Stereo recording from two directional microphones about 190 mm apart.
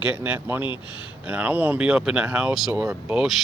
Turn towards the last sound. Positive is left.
turn(degrees=-5)  # may be behind; listen again after turning